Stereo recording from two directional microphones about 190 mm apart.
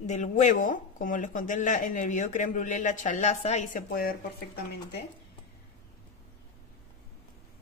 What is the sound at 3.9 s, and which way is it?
Speech, 50° left (ahead or behind).